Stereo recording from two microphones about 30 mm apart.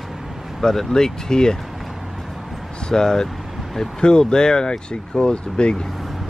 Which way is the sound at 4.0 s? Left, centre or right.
Left.